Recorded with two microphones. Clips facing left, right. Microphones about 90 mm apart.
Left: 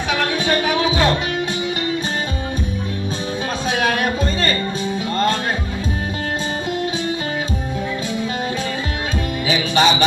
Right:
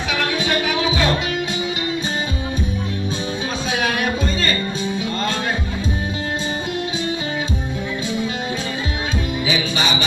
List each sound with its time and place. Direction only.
0.1 s music: 40° left (ahead or behind)
3.7 s music: 40° left (ahead or behind)
9.5 s music: 40° left (ahead or behind)